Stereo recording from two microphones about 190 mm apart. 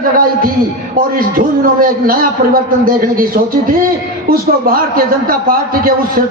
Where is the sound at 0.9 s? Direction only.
50° right (ahead or behind).